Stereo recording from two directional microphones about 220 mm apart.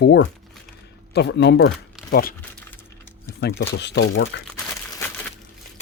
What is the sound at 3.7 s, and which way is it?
Speech, 50° left (ahead or behind).